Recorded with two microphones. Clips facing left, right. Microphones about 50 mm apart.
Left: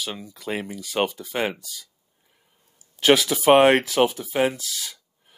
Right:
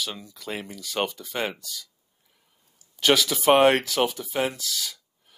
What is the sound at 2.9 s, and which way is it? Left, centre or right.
Speech, centre.